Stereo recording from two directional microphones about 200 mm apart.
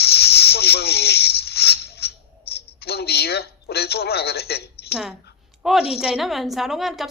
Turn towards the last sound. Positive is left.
turn(degrees=0)  # may be behind; listen again after turning